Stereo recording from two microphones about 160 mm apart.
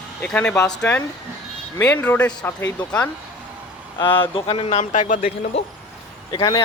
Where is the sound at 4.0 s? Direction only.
30° left (ahead or behind); by 5.3 s 50° left (ahead or behind).